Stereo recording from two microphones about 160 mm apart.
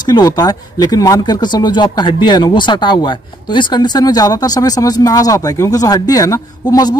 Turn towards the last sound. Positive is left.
turn(degrees=25)  # may be behind; listen again after turning